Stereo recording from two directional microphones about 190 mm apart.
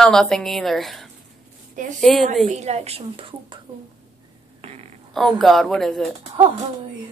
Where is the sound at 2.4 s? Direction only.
35° right (ahead or behind).